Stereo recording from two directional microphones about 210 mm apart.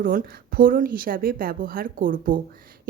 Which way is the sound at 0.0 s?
45° right (ahead or behind).